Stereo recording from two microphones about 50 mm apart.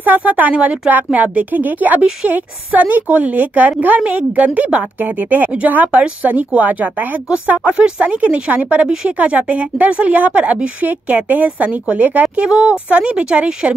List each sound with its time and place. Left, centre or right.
0.0 s a woman's voice: right
12.4 s a woman's voice: centre